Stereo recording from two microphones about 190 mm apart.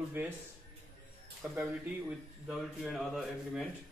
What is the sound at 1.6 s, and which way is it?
A man's voice, 5° right (ahead or behind).